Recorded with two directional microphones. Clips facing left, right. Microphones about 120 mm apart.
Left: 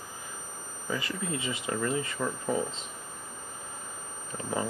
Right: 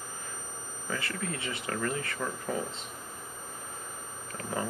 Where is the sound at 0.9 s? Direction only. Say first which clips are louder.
Left 2 dB; 20° left (ahead or behind).